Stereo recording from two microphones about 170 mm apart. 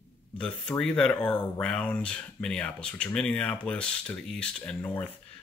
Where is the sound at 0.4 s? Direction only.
5° left (ahead or behind).